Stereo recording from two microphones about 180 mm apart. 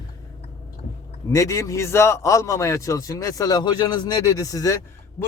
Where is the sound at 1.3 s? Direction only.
15° left (ahead or behind).